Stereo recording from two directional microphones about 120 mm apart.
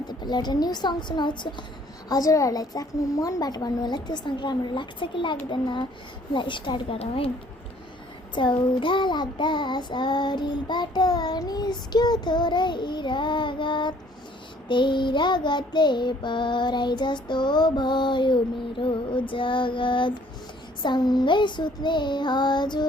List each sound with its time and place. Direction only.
0.2 s child singing: 35° left (ahead or behind)
2.0 s child singing: 30° left (ahead or behind)
6.3 s female singing: 40° left (ahead or behind)
8.4 s child singing: 40° left (ahead or behind)
18.8 s female singing: 45° left (ahead or behind)
20.8 s child singing: 35° left (ahead or behind)